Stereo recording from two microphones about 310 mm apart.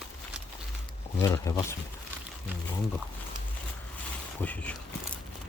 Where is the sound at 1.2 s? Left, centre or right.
Centre.